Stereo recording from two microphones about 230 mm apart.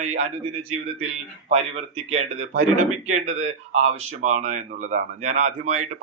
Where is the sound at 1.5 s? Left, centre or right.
Right.